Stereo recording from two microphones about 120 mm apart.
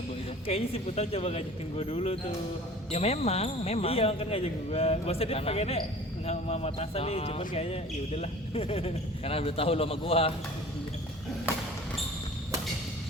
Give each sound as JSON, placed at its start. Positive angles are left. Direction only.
{"t": 0.4, "sound": "speech", "side_deg": 55}